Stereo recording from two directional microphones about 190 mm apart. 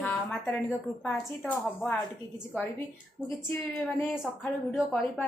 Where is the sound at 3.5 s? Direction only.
5° left (ahead or behind).